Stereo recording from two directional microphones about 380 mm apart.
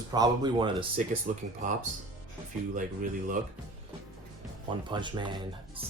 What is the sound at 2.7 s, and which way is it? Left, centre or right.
Speech, right.